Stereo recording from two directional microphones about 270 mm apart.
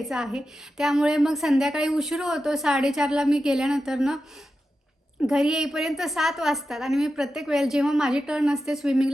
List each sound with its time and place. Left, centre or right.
0.0 s a woman's voice: centre
5.2 s a woman's voice: centre